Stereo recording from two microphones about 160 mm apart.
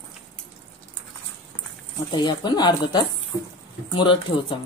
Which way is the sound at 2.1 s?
30° left (ahead or behind).